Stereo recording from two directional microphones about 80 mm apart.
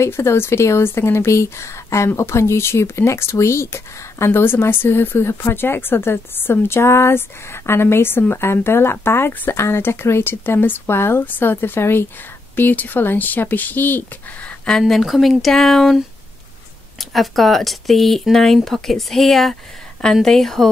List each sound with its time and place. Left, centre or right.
0.0 s speech: left
14.7 s speech: centre
17.0 s speech: centre